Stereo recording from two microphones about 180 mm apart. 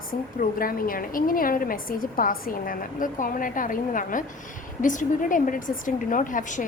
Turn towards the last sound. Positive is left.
turn(degrees=45)  # may be behind; listen again after turning